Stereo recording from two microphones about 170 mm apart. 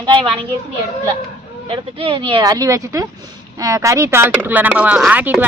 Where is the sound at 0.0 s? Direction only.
25° right (ahead or behind).